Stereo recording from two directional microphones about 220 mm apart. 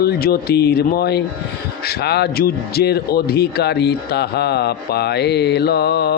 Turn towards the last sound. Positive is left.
turn(degrees=45)  # may be behind; listen again after turning